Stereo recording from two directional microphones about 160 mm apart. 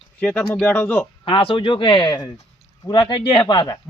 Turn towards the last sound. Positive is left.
turn(degrees=25)  # may be behind; listen again after turning